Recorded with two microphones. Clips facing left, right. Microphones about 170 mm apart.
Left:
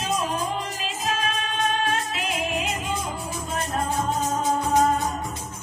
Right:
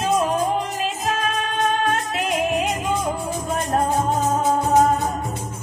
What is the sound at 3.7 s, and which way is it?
Music, 45° right (ahead or behind).